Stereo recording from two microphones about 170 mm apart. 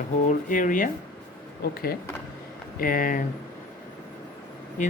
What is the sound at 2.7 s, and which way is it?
Speech, 55° left (ahead or behind).